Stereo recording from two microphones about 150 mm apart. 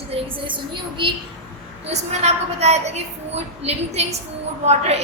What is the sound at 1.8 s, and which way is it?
A woman's voice, 45° right (ahead or behind).